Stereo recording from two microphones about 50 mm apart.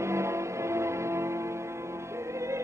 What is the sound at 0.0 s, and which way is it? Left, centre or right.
Music, right.